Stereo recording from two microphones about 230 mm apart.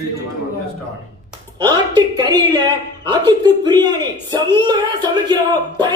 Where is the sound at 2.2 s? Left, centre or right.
Centre.